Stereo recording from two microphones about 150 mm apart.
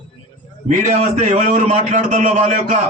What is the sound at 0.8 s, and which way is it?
A man's voice, 55° right (ahead or behind).